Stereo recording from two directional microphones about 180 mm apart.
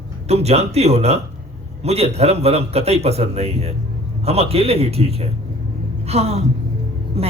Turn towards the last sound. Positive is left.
turn(degrees=-35)  # may be behind; listen again after turning